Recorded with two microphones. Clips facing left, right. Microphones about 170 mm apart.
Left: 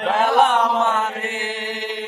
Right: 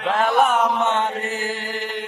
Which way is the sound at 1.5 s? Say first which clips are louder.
Left 1 dB; 40° right (ahead or behind).